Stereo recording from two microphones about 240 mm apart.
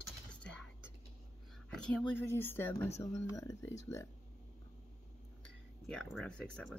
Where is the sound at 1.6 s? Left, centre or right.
Centre.